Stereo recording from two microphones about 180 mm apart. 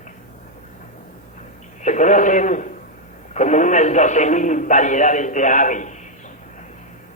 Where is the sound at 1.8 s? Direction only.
45° left (ahead or behind).